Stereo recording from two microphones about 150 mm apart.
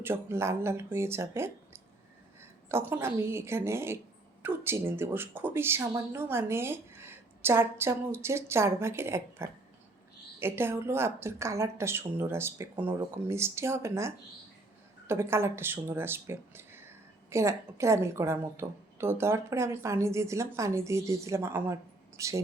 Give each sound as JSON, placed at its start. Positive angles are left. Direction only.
{"t": 0.0, "sound": "a woman's voice", "side_deg": -15}